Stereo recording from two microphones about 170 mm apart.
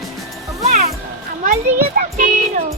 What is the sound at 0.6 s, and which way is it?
Music, 40° right (ahead or behind).